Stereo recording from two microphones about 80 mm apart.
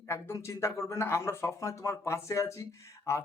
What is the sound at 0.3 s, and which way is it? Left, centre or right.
Speech, left.